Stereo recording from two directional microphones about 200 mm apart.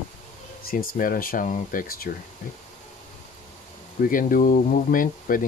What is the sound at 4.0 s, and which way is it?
Speech, 45° left (ahead or behind).